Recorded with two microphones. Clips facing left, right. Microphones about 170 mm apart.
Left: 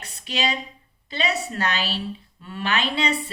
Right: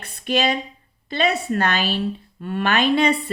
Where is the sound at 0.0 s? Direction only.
55° right (ahead or behind).